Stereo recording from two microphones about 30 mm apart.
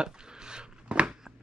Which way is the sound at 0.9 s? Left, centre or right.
Right.